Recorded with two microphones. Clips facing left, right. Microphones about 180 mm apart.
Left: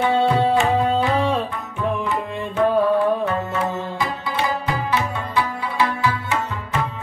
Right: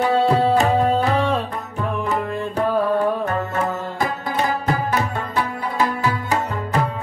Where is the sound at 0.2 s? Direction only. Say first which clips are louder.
Right 1 dB; centre (ahead or behind).